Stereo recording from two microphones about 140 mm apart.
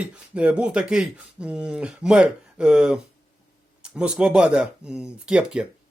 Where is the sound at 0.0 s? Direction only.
10° right (ahead or behind).